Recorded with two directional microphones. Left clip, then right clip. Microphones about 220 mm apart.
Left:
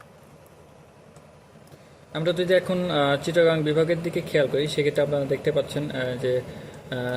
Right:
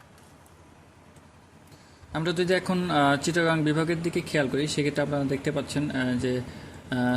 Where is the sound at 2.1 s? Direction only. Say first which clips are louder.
Left 4 dB; 30° right (ahead or behind).